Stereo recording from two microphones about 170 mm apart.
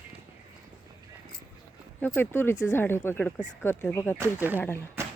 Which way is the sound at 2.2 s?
10° left (ahead or behind).